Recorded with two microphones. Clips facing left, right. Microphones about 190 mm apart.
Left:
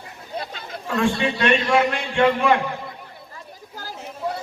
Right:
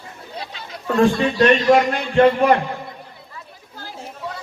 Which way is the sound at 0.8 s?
40° right (ahead or behind).